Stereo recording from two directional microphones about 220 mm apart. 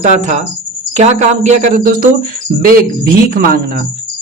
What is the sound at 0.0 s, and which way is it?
Speech, 35° right (ahead or behind).